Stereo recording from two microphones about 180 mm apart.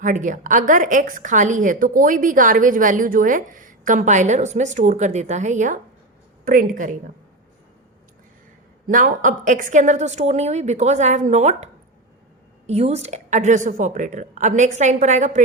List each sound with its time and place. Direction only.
0.0 s a woman's voice: 45° right (ahead or behind)
8.9 s a woman's voice: 45° right (ahead or behind)